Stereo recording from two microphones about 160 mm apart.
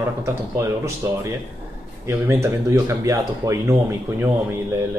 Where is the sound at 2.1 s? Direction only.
15° right (ahead or behind).